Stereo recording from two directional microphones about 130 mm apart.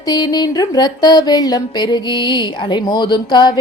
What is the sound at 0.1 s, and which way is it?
A woman's voice, 30° left (ahead or behind).